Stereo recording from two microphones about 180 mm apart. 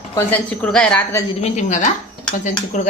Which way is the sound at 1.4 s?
45° left (ahead or behind).